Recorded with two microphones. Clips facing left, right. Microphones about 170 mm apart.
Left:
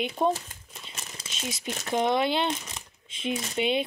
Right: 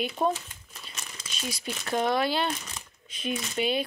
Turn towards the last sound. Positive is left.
turn(degrees=20)  # may be behind; listen again after turning